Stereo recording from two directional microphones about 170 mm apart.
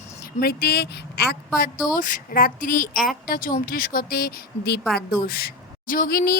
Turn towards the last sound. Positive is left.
turn(degrees=60)  # may be behind; listen again after turning